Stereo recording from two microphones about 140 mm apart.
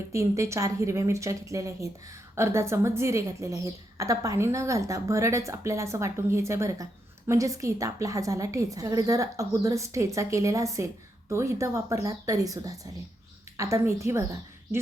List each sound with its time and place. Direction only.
0.1 s a woman's voice: 20° right (ahead or behind)